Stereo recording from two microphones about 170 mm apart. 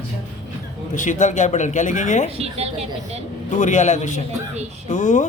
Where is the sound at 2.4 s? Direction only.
35° right (ahead or behind).